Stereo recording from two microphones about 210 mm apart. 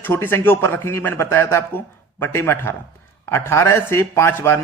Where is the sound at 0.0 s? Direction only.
10° left (ahead or behind).